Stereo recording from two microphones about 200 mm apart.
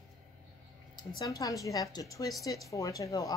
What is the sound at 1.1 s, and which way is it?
A woman's voice, 15° left (ahead or behind).